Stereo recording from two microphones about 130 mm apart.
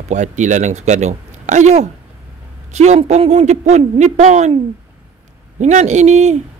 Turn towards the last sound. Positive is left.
turn(degrees=-60)  # may be behind; listen again after turning